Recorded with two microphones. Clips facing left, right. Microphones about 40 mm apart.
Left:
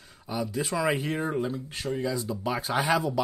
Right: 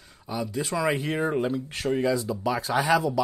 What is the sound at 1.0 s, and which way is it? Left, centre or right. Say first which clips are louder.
Speech: right 3 dB; centre.